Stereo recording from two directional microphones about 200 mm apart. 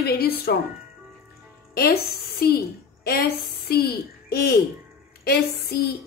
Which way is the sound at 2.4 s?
50° left (ahead or behind).